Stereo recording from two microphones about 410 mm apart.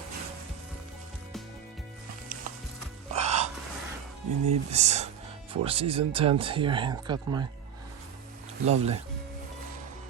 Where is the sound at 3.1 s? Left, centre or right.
Centre.